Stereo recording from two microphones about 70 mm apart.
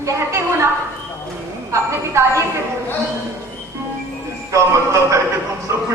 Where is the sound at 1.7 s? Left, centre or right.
Right.